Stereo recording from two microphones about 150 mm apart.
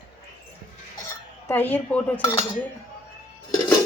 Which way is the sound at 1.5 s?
15° left (ahead or behind).